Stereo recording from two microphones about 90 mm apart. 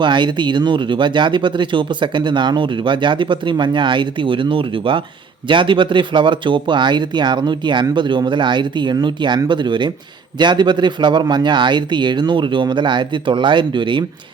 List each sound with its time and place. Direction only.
0.0 s speech: 60° right (ahead or behind)